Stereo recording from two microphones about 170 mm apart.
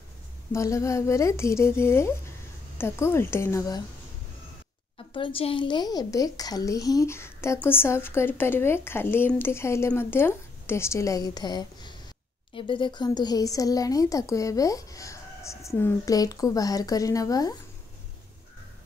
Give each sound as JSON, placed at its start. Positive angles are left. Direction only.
{"t": 0.5, "sound": "speech", "side_deg": 20}
{"t": 4.9, "sound": "speech", "side_deg": 30}